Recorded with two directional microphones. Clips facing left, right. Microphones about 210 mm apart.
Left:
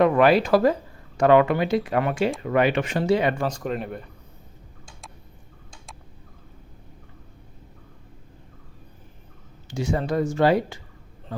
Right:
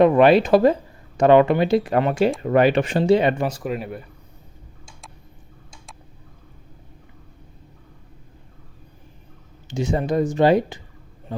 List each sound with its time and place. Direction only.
0.0 s speech: 25° right (ahead or behind)
3.4 s speech: 5° right (ahead or behind)
9.6 s a man's voice: 20° right (ahead or behind)